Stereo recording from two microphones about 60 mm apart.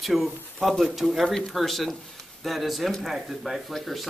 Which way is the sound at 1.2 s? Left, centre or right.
Centre.